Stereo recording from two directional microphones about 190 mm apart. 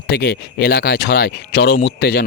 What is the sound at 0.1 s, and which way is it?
Speech, 60° left (ahead or behind).